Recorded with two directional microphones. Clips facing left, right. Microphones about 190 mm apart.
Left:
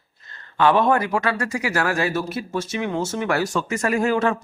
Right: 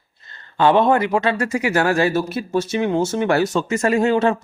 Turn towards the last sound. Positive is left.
turn(degrees=-25)  # may be behind; listen again after turning